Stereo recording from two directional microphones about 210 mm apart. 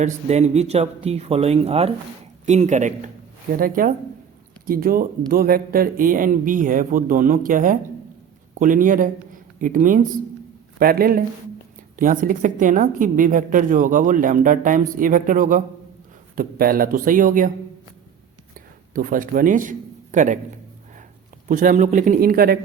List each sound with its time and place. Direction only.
0.0 s a woman's voice: 30° right (ahead or behind)
18.9 s a woman's voice: 40° right (ahead or behind)
21.4 s a woman's voice: 40° right (ahead or behind)